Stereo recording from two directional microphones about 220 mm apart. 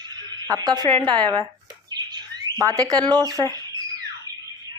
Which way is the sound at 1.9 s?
20° right (ahead or behind).